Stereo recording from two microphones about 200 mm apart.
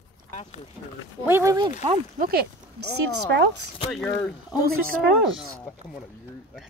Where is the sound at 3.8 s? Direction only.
Centre (ahead or behind).